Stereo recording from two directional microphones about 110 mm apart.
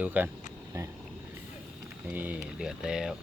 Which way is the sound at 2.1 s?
15° right (ahead or behind).